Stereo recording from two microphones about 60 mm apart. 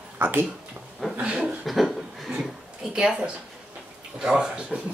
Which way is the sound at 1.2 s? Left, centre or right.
Centre.